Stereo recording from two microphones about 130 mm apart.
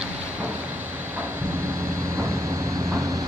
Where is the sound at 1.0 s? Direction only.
15° right (ahead or behind).